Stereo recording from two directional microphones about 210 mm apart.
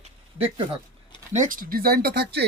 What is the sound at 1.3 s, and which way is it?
Speech, 40° right (ahead or behind).